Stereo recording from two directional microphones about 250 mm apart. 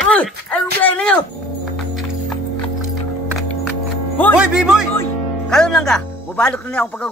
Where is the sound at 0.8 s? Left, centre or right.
Centre.